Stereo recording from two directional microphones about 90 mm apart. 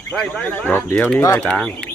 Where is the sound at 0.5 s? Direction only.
25° left (ahead or behind).